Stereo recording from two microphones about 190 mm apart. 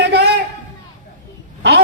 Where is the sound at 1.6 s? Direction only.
65° right (ahead or behind).